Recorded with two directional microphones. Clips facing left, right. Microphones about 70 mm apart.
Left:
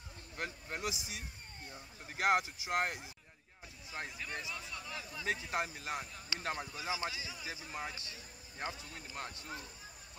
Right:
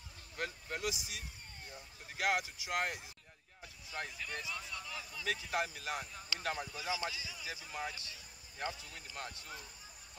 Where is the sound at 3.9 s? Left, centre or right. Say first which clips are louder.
Even; centre.